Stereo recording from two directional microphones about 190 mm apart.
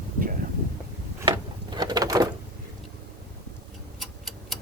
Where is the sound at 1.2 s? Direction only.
20° right (ahead or behind).